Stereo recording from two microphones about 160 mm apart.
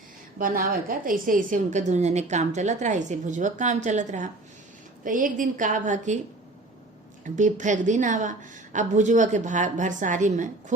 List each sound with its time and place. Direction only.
0.3 s a woman's voice: 60° right (ahead or behind)
7.3 s a woman's voice: 50° right (ahead or behind)